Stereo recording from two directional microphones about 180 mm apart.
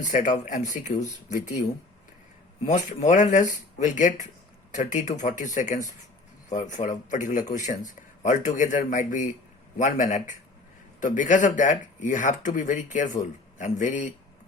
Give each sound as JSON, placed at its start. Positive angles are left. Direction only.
{"t": 0.0, "sound": "speech", "side_deg": 45}
{"t": 2.6, "sound": "speech", "side_deg": 45}